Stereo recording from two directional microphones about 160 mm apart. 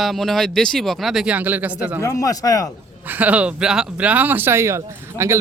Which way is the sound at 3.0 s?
10° right (ahead or behind).